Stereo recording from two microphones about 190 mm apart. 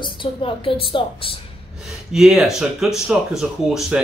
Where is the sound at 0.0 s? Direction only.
25° left (ahead or behind).